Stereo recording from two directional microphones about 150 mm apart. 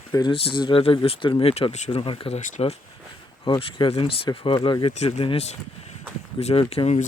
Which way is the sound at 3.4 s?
35° left (ahead or behind).